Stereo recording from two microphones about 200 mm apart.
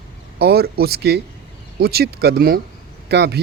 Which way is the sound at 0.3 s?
50° right (ahead or behind).